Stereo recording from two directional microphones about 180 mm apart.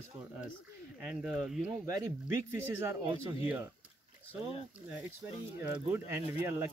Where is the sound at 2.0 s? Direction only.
15° right (ahead or behind).